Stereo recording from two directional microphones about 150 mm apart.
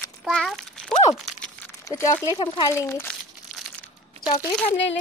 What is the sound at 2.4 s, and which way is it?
Speech, 35° left (ahead or behind).